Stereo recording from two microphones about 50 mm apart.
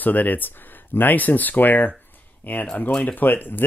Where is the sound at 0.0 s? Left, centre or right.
Left.